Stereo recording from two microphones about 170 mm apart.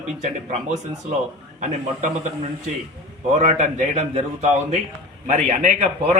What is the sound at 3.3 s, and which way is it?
A man's voice, 45° right (ahead or behind).